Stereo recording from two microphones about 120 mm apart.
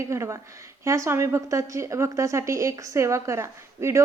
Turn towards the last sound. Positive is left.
turn(degrees=-25)  # may be behind; listen again after turning